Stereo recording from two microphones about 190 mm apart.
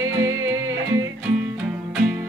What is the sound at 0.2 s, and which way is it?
Music, 15° right (ahead or behind).